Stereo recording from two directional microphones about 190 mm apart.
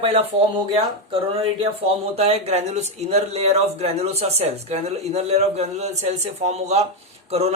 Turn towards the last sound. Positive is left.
turn(degrees=-35)  # may be behind; listen again after turning